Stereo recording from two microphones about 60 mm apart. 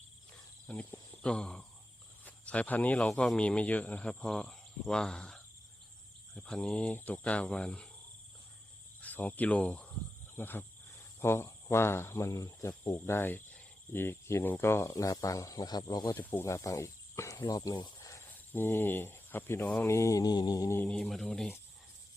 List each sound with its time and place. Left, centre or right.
0.7 s speech: centre
9.0 s speech: left
10.3 s speech: left
15.0 s speech: left
16.4 s speech: left
18.5 s speech: left
19.9 s mantra: left
21.0 s speech: centre